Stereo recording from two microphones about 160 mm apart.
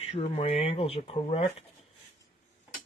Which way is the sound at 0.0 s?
40° left (ahead or behind).